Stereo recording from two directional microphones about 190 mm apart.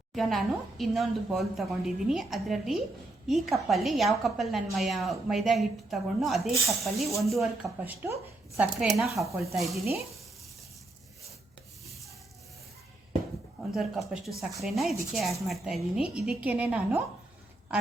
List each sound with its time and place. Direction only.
0.1 s a woman's voice: centre (ahead or behind)
8.0 s a woman's voice: 15° right (ahead or behind)
8.8 s a woman's voice: centre (ahead or behind)
14.1 s a woman's voice: centre (ahead or behind)